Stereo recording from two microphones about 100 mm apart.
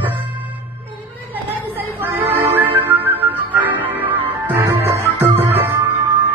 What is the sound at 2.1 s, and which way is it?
Music, 20° right (ahead or behind).